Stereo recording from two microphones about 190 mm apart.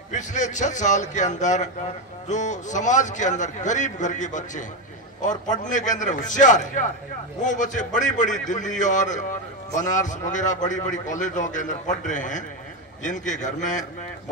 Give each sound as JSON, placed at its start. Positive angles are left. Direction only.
{"t": 0.1, "sound": "a man's voice", "side_deg": 40}